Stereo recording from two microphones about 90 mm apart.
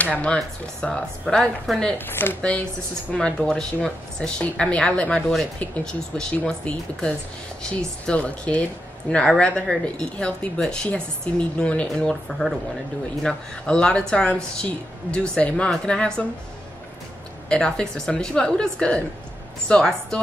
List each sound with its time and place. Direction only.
0.2 s speech: 10° left (ahead or behind)
2.0 s speech: 25° left (ahead or behind)
3.1 s speech: 10° left (ahead or behind)
17.5 s speech: 10° left (ahead or behind)